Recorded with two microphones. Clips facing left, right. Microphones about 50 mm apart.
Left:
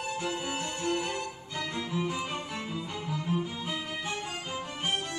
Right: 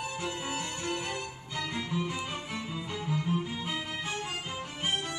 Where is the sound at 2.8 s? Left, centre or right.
Centre.